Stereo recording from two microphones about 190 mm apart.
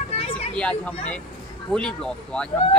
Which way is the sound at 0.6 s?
5° left (ahead or behind).